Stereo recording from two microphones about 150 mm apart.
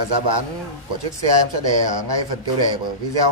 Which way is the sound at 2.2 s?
30° right (ahead or behind).